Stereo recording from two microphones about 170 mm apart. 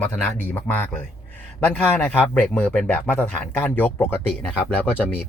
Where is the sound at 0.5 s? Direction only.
10° left (ahead or behind).